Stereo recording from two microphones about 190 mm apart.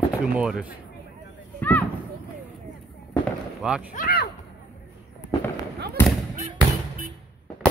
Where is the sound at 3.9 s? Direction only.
50° left (ahead or behind).